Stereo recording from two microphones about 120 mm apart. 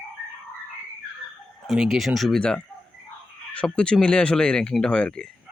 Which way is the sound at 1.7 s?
Centre (ahead or behind).